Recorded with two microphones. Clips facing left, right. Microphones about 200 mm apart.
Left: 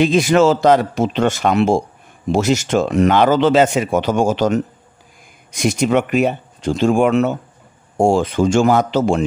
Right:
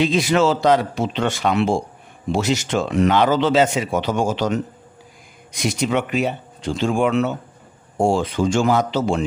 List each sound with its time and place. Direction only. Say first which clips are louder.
0.0 s speech: left 4 dB; 50° left (ahead or behind)